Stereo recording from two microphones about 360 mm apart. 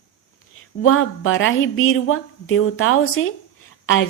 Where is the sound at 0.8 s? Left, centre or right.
Left.